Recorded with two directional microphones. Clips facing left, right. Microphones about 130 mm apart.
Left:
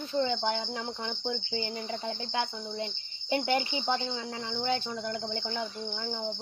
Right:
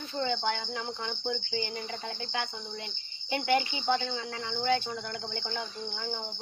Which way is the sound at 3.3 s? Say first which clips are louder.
Even; 25° left (ahead or behind).